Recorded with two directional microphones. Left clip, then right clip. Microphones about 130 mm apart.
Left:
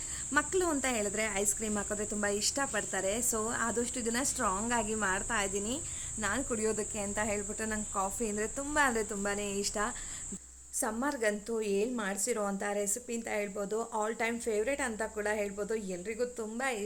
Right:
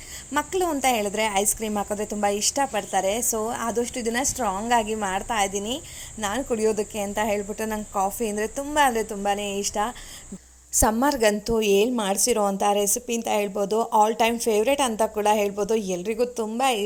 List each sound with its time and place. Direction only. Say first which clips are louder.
0.3 s speech: right 6 dB; 20° right (ahead or behind)
10.8 s a woman's voice: right 13 dB; 65° right (ahead or behind)